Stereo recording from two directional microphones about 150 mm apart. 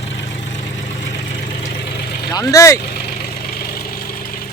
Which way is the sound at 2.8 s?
85° left.